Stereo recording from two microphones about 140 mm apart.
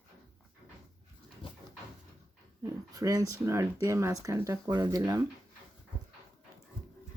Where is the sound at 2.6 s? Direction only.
25° right (ahead or behind).